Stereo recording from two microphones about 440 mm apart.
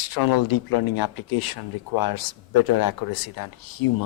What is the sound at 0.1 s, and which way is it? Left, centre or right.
Speech, left.